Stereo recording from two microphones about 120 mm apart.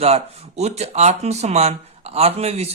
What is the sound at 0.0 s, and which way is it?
Speech, 60° right (ahead or behind).